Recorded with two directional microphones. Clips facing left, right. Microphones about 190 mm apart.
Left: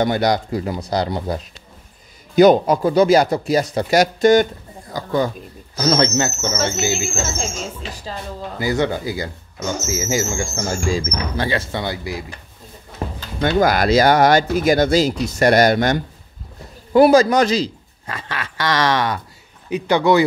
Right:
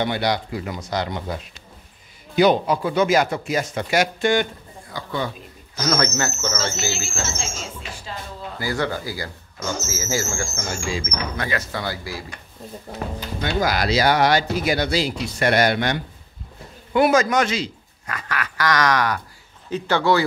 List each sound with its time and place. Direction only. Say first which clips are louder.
0.0 s speech: left 5 dB; 45° left (ahead or behind)
5.8 s speech: left 5 dB; 25° left (ahead or behind)
8.5 s speech: left 5 dB; 20° left (ahead or behind)
10.5 s speech: left 6 dB; 35° left (ahead or behind); by 12.3 s 20° left (ahead or behind)
13.4 s speech: left 6 dB; 50° left (ahead or behind); by 20.2 s 20° left (ahead or behind)